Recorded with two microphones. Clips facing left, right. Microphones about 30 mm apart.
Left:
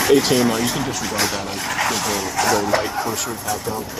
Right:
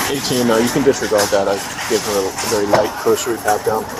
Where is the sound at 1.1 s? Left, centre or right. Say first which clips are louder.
Right 8 dB; centre.